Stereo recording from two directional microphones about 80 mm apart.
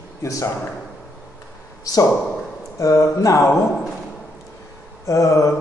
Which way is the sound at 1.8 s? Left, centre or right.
Left.